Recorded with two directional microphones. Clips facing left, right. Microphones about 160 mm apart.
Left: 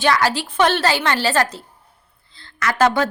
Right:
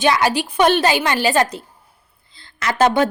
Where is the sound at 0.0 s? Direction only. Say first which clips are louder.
Right 1 dB; 15° right (ahead or behind).